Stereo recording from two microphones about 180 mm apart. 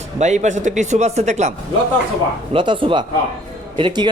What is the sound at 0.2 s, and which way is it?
Speech, 40° right (ahead or behind).